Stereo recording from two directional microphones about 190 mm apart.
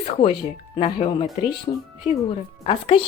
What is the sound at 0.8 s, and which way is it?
Speech, 30° left (ahead or behind).